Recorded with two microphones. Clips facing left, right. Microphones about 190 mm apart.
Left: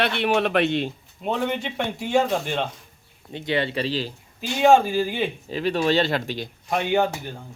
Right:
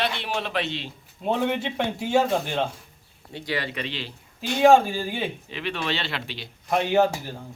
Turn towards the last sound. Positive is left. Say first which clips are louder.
# right 1 dB
turn(degrees=-5)  # may be behind; listen again after turning